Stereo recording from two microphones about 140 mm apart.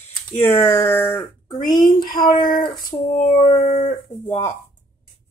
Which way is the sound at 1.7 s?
30° left (ahead or behind).